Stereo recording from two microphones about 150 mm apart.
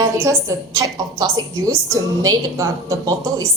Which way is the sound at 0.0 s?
20° right (ahead or behind).